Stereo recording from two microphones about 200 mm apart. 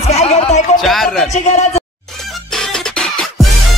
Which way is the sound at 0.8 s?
Centre (ahead or behind).